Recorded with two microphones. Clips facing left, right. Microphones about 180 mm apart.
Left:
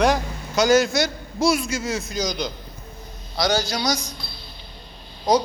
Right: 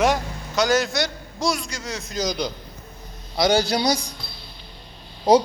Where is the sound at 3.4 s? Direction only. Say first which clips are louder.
Right 3 dB; 25° right (ahead or behind).